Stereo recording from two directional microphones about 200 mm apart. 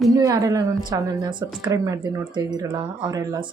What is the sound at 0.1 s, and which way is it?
A woman's voice, 15° right (ahead or behind).